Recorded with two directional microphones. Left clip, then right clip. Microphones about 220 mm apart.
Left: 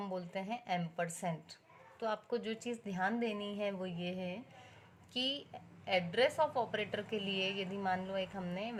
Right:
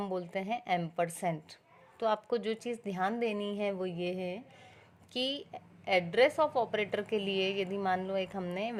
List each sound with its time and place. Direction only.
0.0 s a woman's voice: 40° right (ahead or behind)